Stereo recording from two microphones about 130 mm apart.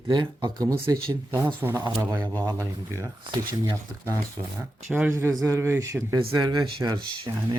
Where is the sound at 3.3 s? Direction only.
35° right (ahead or behind).